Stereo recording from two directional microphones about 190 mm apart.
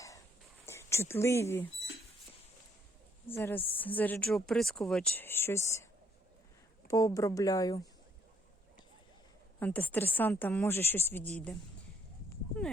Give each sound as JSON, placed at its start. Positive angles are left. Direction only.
{"t": 0.6, "sound": "speech", "side_deg": 15}
{"t": 3.3, "sound": "speech", "side_deg": 10}
{"t": 9.6, "sound": "speech", "side_deg": 10}